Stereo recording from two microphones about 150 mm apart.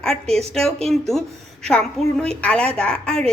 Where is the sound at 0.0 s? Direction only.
5° left (ahead or behind).